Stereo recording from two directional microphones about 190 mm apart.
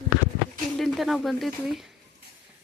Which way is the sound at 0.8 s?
Centre (ahead or behind).